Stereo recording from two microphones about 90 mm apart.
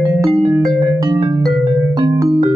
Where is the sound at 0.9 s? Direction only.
40° right (ahead or behind).